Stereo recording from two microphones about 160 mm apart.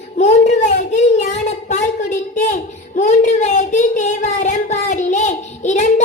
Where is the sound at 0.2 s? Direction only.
50° left (ahead or behind).